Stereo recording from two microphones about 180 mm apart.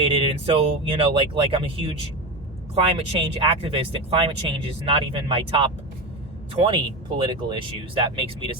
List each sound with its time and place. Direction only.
0.0 s speech: 30° right (ahead or behind)
7.2 s speech: 25° right (ahead or behind)